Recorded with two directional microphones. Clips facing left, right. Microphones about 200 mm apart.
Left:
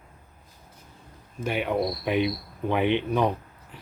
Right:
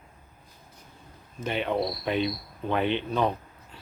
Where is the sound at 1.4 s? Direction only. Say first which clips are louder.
Left 2 dB; 10° left (ahead or behind).